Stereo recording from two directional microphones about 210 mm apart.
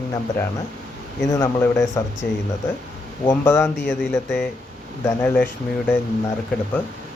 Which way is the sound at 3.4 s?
10° left (ahead or behind).